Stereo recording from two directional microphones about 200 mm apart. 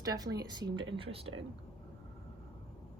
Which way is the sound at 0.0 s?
20° right (ahead or behind).